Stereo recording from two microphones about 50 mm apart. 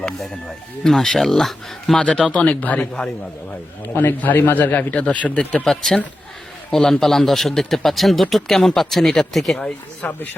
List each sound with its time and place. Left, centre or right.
0.9 s speech: centre
2.0 s speech: left
3.8 s a man's voice: left
5.6 s a man's voice: centre
9.6 s speech: left